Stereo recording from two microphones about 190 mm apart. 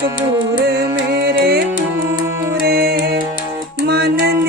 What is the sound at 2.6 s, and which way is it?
Music, 55° right (ahead or behind).